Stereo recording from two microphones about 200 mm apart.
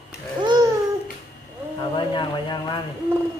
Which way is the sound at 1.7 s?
20° left (ahead or behind).